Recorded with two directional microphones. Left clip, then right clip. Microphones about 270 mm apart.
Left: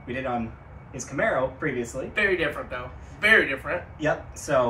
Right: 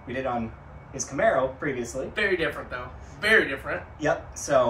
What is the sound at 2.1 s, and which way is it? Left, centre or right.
A man's voice, centre.